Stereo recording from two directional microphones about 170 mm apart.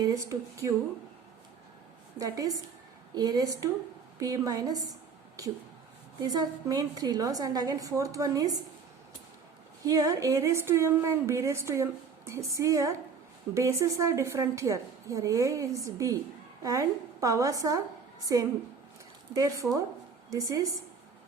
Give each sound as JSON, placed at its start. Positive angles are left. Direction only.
{"t": 0.0, "sound": "a woman's voice", "side_deg": -20}
{"t": 2.1, "sound": "a woman's voice", "side_deg": -20}
{"t": 6.1, "sound": "a woman's voice", "side_deg": -25}
{"t": 9.8, "sound": "a woman's voice", "side_deg": -20}